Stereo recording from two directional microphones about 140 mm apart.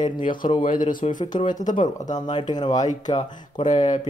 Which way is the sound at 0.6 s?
70° left (ahead or behind).